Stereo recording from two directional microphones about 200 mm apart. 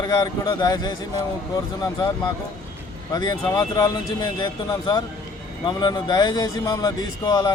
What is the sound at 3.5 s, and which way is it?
Speech, 15° left (ahead or behind).